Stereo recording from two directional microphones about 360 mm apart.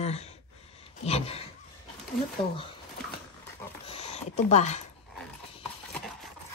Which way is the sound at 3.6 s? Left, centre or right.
Centre.